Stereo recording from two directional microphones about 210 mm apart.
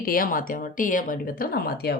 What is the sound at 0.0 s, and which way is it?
Speech, 40° left (ahead or behind).